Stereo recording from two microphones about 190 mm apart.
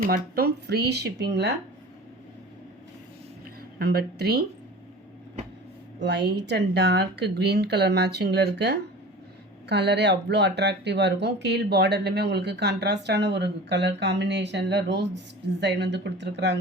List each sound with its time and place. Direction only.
0.0 s speech: 55° right (ahead or behind)
3.8 s speech: 55° right (ahead or behind)
6.0 s speech: 60° right (ahead or behind)